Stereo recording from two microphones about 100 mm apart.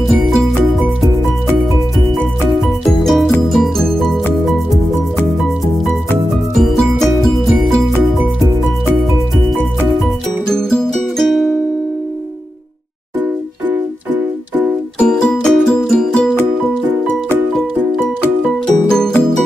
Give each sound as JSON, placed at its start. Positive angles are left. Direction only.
{"t": 0.0, "sound": "music", "side_deg": 0}
{"t": 2.5, "sound": "music", "side_deg": 0}
{"t": 7.3, "sound": "music", "side_deg": 0}
{"t": 10.5, "sound": "music", "side_deg": 5}
{"t": 13.2, "sound": "music", "side_deg": -15}
{"t": 15.0, "sound": "music", "side_deg": 10}
{"t": 18.9, "sound": "music", "side_deg": 5}